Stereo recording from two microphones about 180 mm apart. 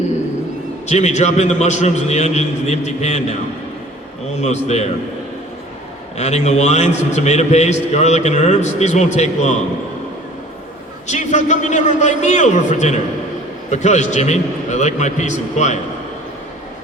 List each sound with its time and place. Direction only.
0.9 s a man's voice: 40° left (ahead or behind)
6.1 s a man's voice: 40° left (ahead or behind)
11.0 s a man's voice: 40° left (ahead or behind)